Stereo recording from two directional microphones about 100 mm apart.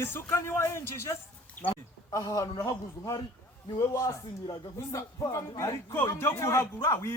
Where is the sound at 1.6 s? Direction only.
15° left (ahead or behind).